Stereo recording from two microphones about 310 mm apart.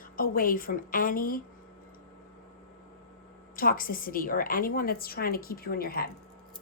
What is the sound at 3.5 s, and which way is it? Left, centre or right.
Speech, left.